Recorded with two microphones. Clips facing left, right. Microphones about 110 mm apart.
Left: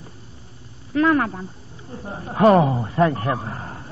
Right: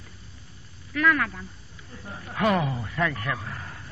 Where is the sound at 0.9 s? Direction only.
30° left (ahead or behind).